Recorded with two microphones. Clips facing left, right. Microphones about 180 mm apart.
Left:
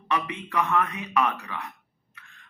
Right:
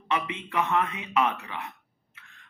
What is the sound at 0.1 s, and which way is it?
Speech, 20° right (ahead or behind).